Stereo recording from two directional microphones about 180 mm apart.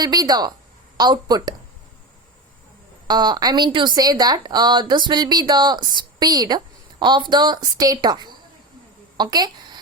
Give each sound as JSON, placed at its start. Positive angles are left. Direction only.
{"t": 0.0, "sound": "a woman's voice", "side_deg": -20}
{"t": 3.1, "sound": "a woman's voice", "side_deg": -25}